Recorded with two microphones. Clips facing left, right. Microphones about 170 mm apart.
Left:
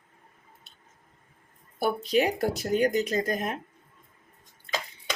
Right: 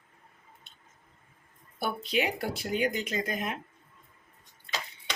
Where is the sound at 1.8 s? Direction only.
40° left (ahead or behind).